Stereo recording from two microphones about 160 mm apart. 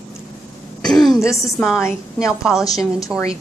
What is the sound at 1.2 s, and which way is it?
Speech, 20° left (ahead or behind).